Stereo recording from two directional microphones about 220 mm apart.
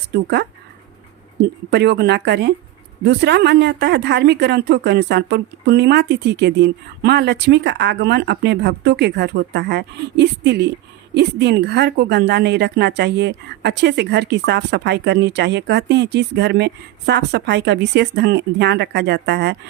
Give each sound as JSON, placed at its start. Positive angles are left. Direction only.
{"t": 0.1, "sound": "a woman's voice", "side_deg": -50}
{"t": 1.7, "sound": "a woman's voice", "side_deg": -50}